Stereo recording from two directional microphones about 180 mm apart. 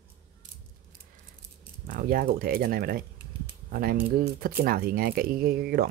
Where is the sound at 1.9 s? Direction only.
55° right (ahead or behind).